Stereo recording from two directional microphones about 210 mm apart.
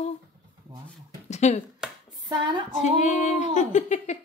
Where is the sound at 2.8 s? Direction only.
35° left (ahead or behind).